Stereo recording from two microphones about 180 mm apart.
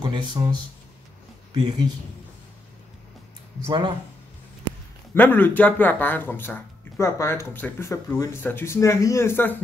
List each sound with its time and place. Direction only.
0.0 s speech: 25° right (ahead or behind)
3.6 s speech: 25° right (ahead or behind)
5.1 s speech: 10° left (ahead or behind)